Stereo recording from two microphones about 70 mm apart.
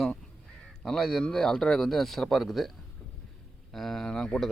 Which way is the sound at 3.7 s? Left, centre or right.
Centre.